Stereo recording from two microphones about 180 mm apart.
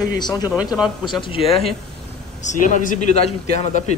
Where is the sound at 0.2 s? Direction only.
20° left (ahead or behind).